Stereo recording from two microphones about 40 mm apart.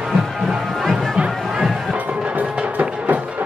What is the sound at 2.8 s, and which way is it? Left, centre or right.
Music, right.